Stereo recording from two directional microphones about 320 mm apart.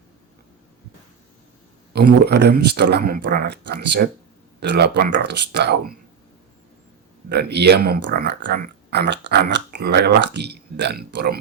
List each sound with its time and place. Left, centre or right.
1.9 s a sound: right
2.5 s speech: right
7.3 s speech: right